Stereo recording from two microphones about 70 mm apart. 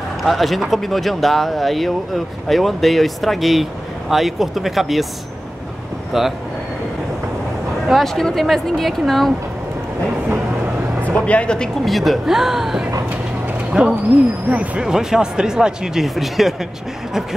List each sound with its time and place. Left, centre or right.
0.2 s speech: centre
6.1 s speech: centre
7.9 s speech: centre
11.2 s speech: centre
11.8 s speech: centre
14.5 s speech: right
14.9 s speech: centre